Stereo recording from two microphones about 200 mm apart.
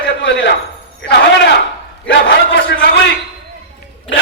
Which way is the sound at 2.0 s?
60° left (ahead or behind).